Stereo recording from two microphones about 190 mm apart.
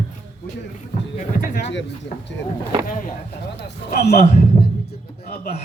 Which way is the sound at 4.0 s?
40° left (ahead or behind).